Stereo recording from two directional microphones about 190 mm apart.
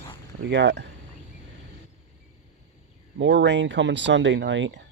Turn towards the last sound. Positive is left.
turn(degrees=-70)  # may be behind; listen again after turning